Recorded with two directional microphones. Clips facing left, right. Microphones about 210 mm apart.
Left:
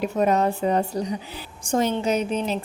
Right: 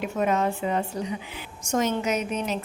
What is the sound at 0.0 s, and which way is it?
A woman's voice, 35° left (ahead or behind).